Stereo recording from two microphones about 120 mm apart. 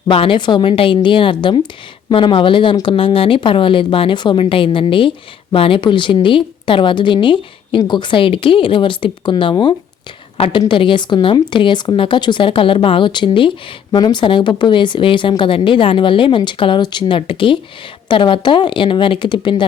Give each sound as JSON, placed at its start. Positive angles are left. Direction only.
{"t": 0.1, "sound": "speech", "side_deg": 45}
{"t": 10.3, "sound": "a woman's voice", "side_deg": 55}